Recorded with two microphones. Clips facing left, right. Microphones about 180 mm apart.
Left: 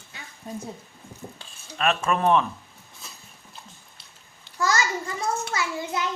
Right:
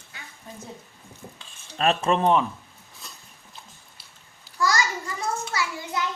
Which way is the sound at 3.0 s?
Centre (ahead or behind).